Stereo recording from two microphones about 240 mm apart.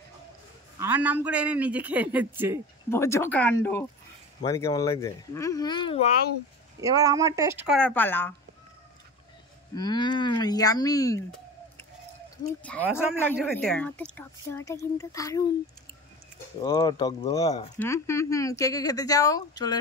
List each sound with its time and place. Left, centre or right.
0.7 s a man's voice: centre
2.9 s speech: centre
6.8 s a man's voice: centre
9.8 s speech: centre
12.6 s speech: centre
16.6 s speech: centre